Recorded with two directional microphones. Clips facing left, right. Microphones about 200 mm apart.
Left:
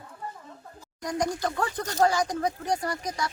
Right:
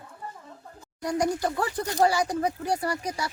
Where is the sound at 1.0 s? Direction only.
10° right (ahead or behind).